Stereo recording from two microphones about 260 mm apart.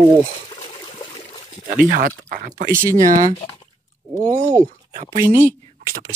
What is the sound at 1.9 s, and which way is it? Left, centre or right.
Speech, right.